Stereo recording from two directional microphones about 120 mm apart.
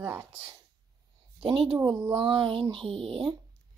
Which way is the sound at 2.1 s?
45° right (ahead or behind).